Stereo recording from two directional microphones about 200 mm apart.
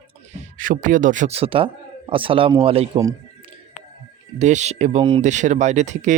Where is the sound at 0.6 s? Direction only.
40° right (ahead or behind).